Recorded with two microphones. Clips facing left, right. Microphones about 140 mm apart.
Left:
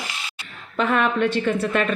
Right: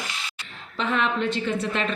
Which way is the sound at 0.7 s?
55° left (ahead or behind).